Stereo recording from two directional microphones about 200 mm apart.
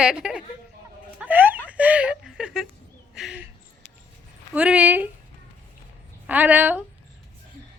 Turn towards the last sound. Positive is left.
turn(degrees=-10)  # may be behind; listen again after turning